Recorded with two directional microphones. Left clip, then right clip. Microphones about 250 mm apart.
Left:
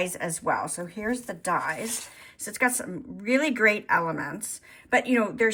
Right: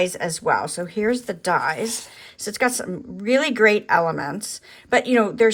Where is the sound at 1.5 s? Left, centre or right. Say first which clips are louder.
Right 6 dB; centre.